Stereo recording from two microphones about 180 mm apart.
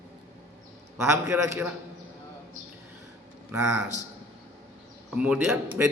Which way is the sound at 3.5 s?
10° right (ahead or behind).